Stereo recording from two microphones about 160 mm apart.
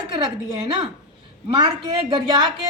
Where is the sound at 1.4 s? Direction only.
30° right (ahead or behind).